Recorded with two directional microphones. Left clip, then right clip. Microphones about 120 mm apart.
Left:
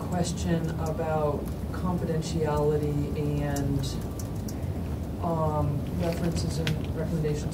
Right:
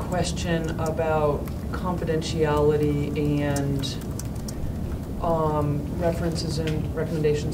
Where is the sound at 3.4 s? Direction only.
25° right (ahead or behind).